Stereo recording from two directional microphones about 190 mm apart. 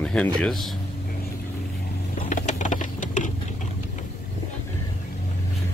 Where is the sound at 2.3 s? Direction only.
40° left (ahead or behind).